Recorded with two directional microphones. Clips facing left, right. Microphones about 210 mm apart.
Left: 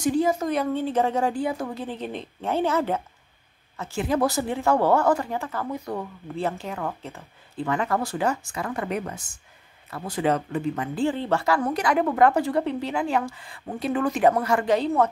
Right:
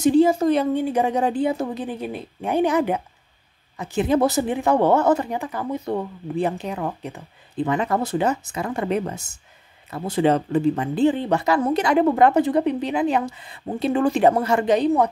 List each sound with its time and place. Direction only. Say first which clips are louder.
0.0 s speech: right 6 dB; 30° right (ahead or behind)
0.7 s a woman's voice: right 3 dB; 15° right (ahead or behind)